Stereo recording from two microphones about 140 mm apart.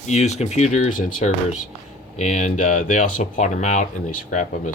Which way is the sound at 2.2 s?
60° left (ahead or behind).